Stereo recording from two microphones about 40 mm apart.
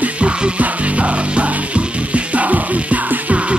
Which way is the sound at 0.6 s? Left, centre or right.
Right.